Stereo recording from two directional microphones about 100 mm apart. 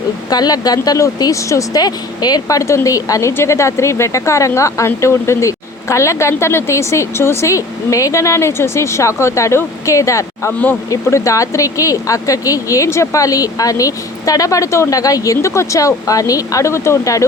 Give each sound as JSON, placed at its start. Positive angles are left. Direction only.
{"t": 0.3, "sound": "speech", "side_deg": 40}